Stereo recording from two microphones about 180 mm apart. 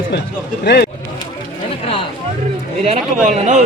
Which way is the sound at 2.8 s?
40° right (ahead or behind).